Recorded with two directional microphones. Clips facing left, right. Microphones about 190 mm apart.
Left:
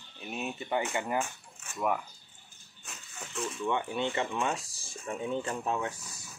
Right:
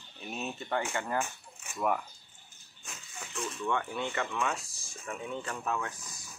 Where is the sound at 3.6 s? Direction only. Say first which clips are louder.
Left 2 dB; 15° left (ahead or behind).